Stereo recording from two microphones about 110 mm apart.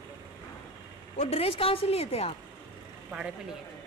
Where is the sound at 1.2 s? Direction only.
70° left (ahead or behind).